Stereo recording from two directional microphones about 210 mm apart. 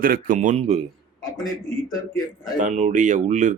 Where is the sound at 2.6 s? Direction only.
35° right (ahead or behind).